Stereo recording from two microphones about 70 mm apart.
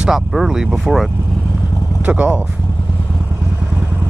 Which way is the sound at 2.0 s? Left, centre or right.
Centre.